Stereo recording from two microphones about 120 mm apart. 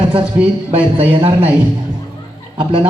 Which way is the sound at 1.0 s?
50° right (ahead or behind).